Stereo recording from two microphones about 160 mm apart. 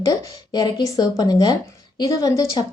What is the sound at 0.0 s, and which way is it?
Speech, 25° left (ahead or behind).